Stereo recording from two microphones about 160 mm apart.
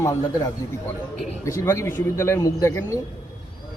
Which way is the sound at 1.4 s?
20° left (ahead or behind).